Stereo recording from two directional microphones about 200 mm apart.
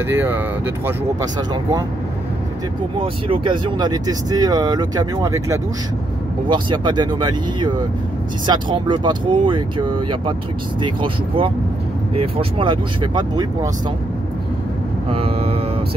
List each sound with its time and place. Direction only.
0.1 s speech: 10° right (ahead or behind)
3.0 s speech: 25° right (ahead or behind)
10.8 s speech: 25° right (ahead or behind)
15.0 s speech: 30° right (ahead or behind)